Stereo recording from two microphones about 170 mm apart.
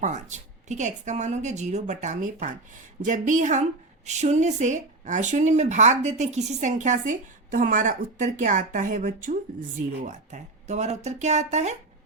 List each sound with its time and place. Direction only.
0.0 s speech: 45° right (ahead or behind)